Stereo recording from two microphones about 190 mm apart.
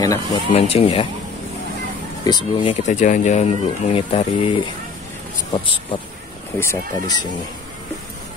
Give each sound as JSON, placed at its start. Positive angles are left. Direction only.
{"t": 0.0, "sound": "speech", "side_deg": 20}
{"t": 0.5, "sound": "speech", "side_deg": 35}
{"t": 2.2, "sound": "speech", "side_deg": 25}
{"t": 2.9, "sound": "speech", "side_deg": 40}
{"t": 6.6, "sound": "speech", "side_deg": 15}